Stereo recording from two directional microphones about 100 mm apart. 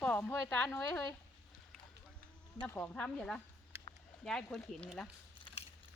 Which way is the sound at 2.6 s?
15° left (ahead or behind).